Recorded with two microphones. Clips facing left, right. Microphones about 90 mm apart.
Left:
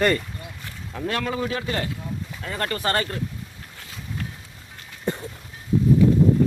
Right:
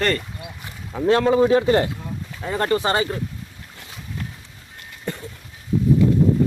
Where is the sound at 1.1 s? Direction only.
25° right (ahead or behind).